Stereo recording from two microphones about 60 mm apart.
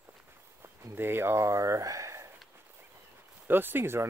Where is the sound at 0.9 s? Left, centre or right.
Right.